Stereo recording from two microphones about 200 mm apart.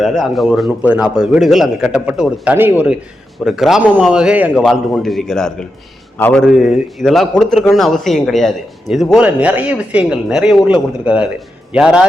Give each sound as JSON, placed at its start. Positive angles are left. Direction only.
{"t": 0.0, "sound": "a man's voice", "side_deg": 0}
{"t": 6.4, "sound": "a man's voice", "side_deg": 0}